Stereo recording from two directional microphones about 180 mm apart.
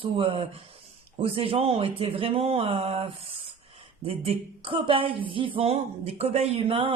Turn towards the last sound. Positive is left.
turn(degrees=-30)  # may be behind; listen again after turning